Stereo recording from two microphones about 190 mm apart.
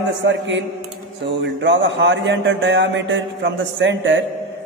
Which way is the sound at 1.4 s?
70° right (ahead or behind).